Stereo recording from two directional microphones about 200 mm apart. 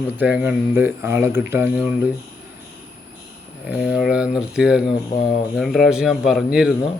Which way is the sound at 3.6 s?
Centre (ahead or behind).